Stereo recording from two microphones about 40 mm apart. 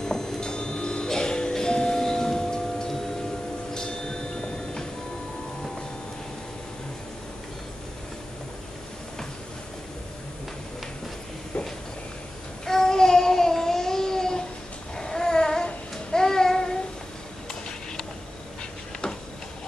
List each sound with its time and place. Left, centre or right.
0.0 s music: centre
3.7 s a sound: centre
11.5 s a sound: left
12.6 s babbling: centre
15.0 s dog: centre
15.6 s babbling: centre